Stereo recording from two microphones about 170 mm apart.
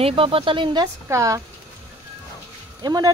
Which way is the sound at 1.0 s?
20° right (ahead or behind).